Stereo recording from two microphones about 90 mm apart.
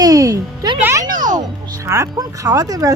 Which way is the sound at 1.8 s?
35° right (ahead or behind).